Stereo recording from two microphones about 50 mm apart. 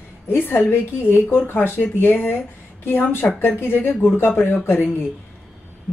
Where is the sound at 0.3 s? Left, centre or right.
Left.